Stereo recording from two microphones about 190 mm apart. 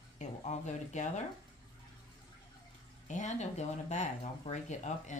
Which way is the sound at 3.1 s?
40° left (ahead or behind).